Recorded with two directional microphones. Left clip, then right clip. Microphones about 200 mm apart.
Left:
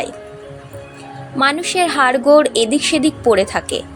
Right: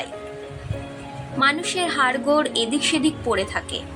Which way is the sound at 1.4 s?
35° left (ahead or behind).